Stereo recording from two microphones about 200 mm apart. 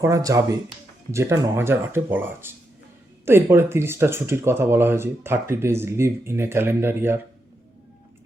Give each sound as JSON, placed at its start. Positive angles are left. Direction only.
{"t": 0.0, "sound": "speech", "side_deg": -15}